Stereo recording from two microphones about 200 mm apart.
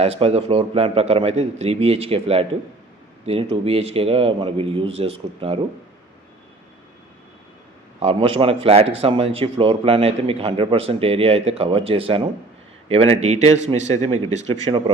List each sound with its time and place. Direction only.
0.0 s a man's voice: 30° right (ahead or behind)
7.9 s a man's voice: 30° right (ahead or behind)